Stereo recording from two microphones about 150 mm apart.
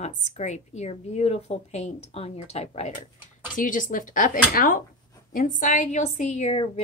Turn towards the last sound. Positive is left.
turn(degrees=45)  # may be behind; listen again after turning